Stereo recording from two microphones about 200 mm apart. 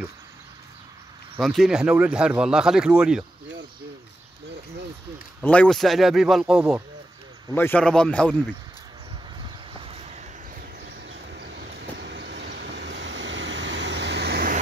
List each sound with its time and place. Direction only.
1.4 s speech: centre (ahead or behind)
5.4 s speech: 5° left (ahead or behind)
7.5 s speech: 10° left (ahead or behind)
9.4 s waves: 30° right (ahead or behind)
12.0 s vehicle: 60° right (ahead or behind)